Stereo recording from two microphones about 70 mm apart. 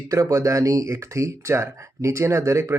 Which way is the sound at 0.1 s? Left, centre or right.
Right.